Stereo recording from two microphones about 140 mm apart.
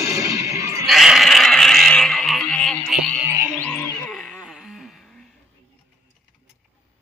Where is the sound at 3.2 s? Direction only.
20° right (ahead or behind).